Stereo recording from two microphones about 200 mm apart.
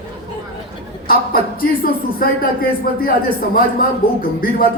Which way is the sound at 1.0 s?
45° left (ahead or behind).